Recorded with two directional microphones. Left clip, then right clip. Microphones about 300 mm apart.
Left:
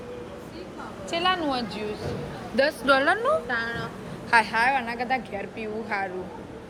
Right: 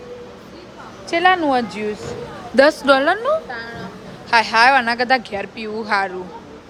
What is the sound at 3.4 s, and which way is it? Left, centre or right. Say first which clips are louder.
Speech: left 2 dB; left.